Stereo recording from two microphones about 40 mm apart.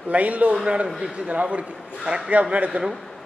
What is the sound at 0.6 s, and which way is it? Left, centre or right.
A man's voice, right.